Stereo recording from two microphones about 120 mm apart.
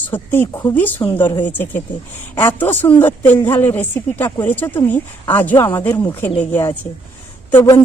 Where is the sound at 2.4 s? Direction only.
15° left (ahead or behind).